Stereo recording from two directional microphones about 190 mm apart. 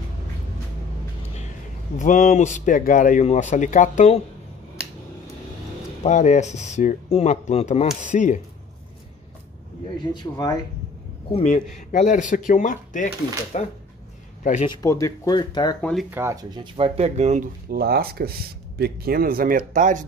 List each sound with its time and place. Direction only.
2.0 s speech: 40° left (ahead or behind)
6.0 s speech: 40° left (ahead or behind)
10.1 s speech: 20° left (ahead or behind)
11.3 s speech: 40° left (ahead or behind)
14.7 s speech: 20° left (ahead or behind)
15.8 s speech: centre (ahead or behind)
16.1 s speech: 15° right (ahead or behind); by 17.5 s 35° right (ahead or behind)
17.6 s speech: 55° right (ahead or behind)